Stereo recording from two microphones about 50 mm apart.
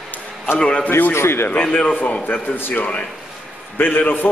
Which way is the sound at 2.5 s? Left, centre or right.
Left.